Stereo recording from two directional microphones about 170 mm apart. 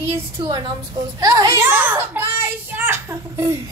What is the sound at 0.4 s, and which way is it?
A woman's voice, 25° right (ahead or behind).